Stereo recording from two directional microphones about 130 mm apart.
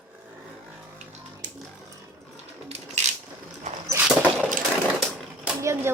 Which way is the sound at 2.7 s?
60° right (ahead or behind).